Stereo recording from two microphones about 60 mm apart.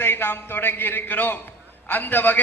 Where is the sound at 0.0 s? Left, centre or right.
Left.